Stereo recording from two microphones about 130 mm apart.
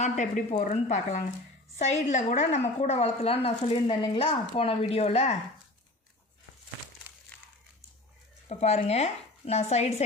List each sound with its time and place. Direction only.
0.0 s speech: 70° left (ahead or behind); by 5.4 s 55° left (ahead or behind)
7.1 s crumpling: 15° right (ahead or behind)
8.4 s speech: 55° left (ahead or behind)